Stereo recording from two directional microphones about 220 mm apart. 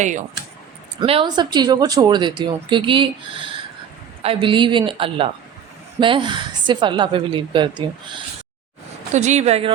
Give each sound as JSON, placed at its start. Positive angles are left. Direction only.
{"t": 0.0, "sound": "speech", "side_deg": -35}
{"t": 0.9, "sound": "speech", "side_deg": -25}
{"t": 9.1, "sound": "speech", "side_deg": -30}